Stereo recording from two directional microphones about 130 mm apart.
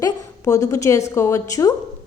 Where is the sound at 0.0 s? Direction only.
25° left (ahead or behind).